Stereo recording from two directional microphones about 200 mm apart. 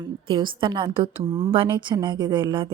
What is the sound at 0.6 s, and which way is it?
A woman's voice, 25° right (ahead or behind).